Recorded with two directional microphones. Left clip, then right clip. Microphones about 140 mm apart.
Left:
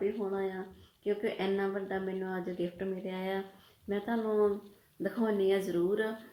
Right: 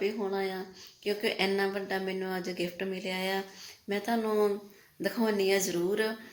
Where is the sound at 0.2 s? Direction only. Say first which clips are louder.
Right 2 dB; 20° right (ahead or behind).